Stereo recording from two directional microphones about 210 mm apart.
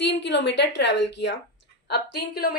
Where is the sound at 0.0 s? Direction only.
60° left (ahead or behind).